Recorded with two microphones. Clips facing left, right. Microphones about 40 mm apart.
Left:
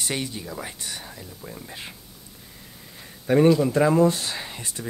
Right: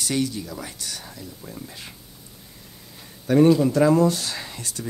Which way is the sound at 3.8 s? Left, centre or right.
Left.